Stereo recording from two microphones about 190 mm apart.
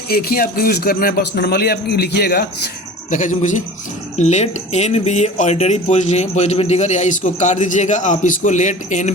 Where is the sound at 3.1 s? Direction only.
40° left (ahead or behind).